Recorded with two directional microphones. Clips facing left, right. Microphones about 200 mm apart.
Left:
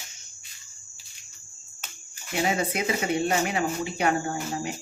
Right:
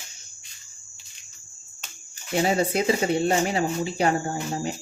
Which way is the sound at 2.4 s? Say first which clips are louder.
Right 4 dB; 35° right (ahead or behind).